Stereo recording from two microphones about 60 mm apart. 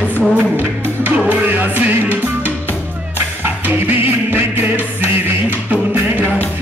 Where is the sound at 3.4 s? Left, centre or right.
Right.